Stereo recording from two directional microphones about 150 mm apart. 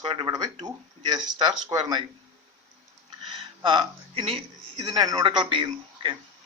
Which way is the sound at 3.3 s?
30° right (ahead or behind).